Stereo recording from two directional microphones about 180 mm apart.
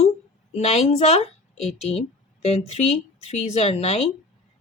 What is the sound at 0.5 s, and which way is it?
Speech, 35° left (ahead or behind).